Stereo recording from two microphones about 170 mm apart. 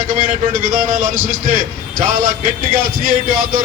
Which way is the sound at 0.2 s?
50° right (ahead or behind).